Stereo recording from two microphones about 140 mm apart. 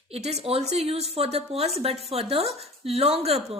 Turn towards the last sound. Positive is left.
turn(degrees=-45)  # may be behind; listen again after turning